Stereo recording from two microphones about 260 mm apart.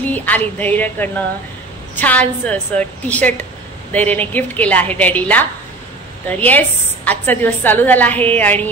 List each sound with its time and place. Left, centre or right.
0.0 s a woman's voice: centre